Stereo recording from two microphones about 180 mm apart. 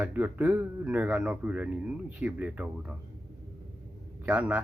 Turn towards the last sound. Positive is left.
turn(degrees=-5)  # may be behind; listen again after turning